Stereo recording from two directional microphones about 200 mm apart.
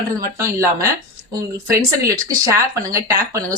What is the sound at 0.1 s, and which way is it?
Speech, 15° right (ahead or behind).